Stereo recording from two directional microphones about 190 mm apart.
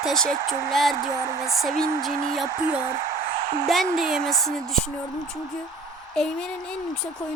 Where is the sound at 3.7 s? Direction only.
Centre (ahead or behind).